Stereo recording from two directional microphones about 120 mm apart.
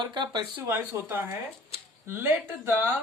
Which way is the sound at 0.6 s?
15° right (ahead or behind).